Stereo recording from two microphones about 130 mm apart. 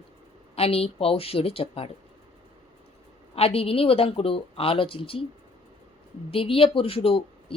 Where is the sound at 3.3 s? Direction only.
50° left (ahead or behind).